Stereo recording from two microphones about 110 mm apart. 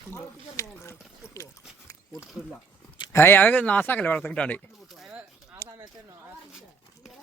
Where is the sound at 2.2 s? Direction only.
5° right (ahead or behind).